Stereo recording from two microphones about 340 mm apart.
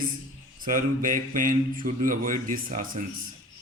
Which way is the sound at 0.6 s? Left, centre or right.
Right.